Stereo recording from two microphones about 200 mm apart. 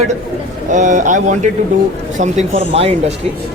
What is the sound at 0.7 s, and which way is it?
Speech, 35° right (ahead or behind).